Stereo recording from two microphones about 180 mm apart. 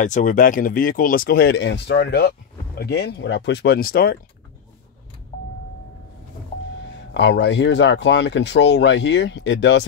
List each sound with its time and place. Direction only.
0.0 s speech: 45° left (ahead or behind)
7.2 s speech: 80° left